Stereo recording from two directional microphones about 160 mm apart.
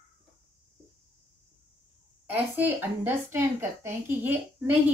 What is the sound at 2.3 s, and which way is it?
A woman's voice, 10° right (ahead or behind).